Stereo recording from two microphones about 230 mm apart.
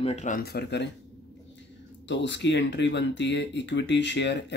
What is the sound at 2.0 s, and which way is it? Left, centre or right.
Speech, left.